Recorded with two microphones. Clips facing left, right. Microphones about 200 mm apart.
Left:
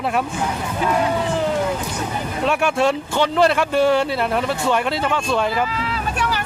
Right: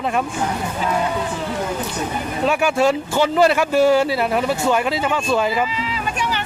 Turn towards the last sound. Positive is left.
turn(degrees=-5)  # may be behind; listen again after turning